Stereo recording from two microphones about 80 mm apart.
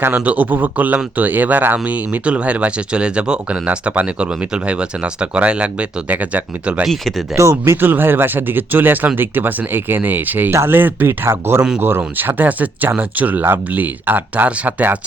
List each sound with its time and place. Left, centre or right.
0.0 s speech: right
6.8 s speech: centre
7.3 s speech: right